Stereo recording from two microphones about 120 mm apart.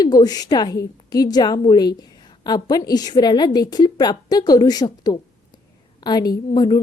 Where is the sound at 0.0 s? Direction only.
35° left (ahead or behind).